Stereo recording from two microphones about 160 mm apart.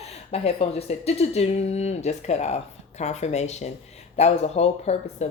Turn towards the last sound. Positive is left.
turn(degrees=40)  # may be behind; listen again after turning